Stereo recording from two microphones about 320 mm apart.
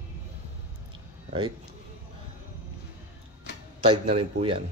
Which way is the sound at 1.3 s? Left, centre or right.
Centre.